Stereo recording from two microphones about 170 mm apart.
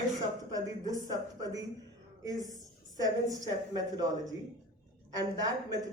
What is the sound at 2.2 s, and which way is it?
Music, 20° right (ahead or behind).